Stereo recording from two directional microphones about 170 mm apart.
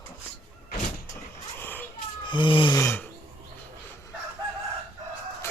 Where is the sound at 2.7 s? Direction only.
15° left (ahead or behind).